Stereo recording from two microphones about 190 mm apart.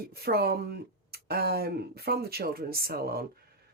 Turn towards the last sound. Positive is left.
turn(degrees=-55)  # may be behind; listen again after turning